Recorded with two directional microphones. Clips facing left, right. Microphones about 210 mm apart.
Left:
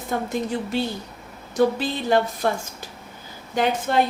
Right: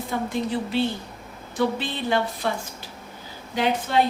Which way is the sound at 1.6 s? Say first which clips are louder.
Left 4 dB; 45° left (ahead or behind).